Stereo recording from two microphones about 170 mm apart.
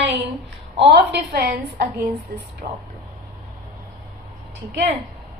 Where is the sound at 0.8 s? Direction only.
75° right (ahead or behind); by 2.8 s 60° right (ahead or behind).